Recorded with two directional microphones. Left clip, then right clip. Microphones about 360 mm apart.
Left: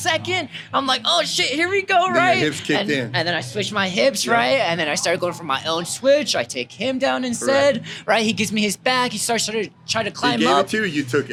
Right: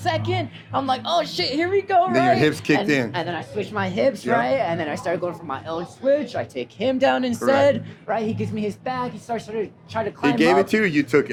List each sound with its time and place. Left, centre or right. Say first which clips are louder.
0.0 s speech: left 3 dB; left
2.1 s speech: left 1 dB; centre
3.1 s speech: left 5 dB; left
3.8 s speech: left 3 dB; left
6.6 s speech: right 1 dB; centre
8.0 s a woman's voice: left 6 dB; left
10.3 s speech: right 1 dB; centre